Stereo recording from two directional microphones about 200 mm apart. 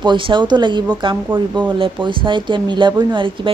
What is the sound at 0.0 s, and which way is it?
Speech, 25° right (ahead or behind).